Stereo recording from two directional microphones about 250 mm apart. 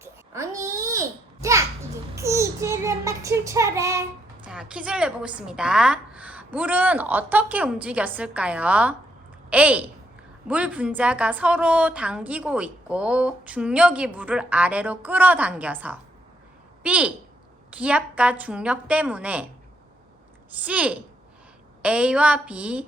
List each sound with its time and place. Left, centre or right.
0.0 s babbling: centre
2.1 s child singing: centre
4.4 s a woman's voice: centre
20.6 s a woman's voice: centre